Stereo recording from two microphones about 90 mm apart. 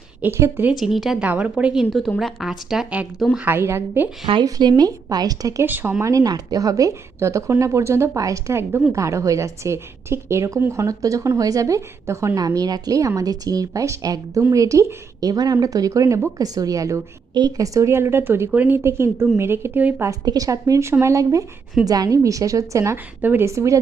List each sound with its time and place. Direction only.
0.2 s speech: 30° right (ahead or behind)
0.7 s a woman's voice: 5° right (ahead or behind)
3.4 s speech: 25° right (ahead or behind)
4.4 s a woman's voice: 45° right (ahead or behind)
5.6 s speech: 20° right (ahead or behind)
6.0 s a woman's voice: 40° right (ahead or behind); by 18.8 s 20° right (ahead or behind)
18.8 s speech: 30° right (ahead or behind)
20.2 s a woman's voice: 40° right (ahead or behind)
23.2 s speech: 20° right (ahead or behind)
23.5 s a woman's voice: 35° right (ahead or behind)